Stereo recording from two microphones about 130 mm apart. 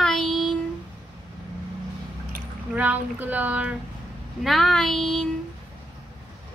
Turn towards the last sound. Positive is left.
turn(degrees=5)  # may be behind; listen again after turning